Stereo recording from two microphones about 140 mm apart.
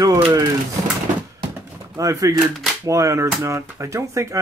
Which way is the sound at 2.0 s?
25° right (ahead or behind).